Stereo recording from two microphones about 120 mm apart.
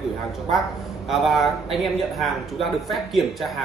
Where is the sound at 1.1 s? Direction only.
Centre (ahead or behind).